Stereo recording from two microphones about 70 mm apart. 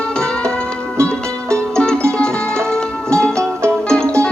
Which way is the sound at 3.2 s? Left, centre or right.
Centre.